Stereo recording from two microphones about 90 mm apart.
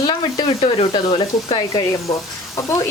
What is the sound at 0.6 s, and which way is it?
Speech, 90° left.